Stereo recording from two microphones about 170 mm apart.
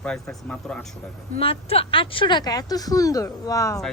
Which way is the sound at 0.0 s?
5° left (ahead or behind).